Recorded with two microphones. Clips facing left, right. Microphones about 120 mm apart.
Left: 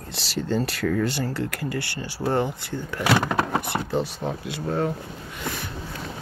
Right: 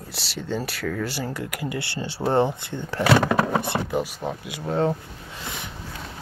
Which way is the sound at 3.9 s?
10° right (ahead or behind).